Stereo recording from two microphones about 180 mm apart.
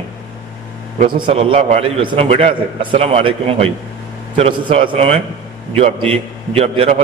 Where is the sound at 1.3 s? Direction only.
30° right (ahead or behind).